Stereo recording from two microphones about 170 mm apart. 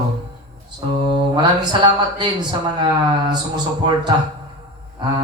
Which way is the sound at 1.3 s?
25° right (ahead or behind).